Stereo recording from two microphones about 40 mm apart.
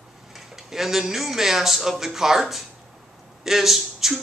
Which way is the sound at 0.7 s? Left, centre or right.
Centre.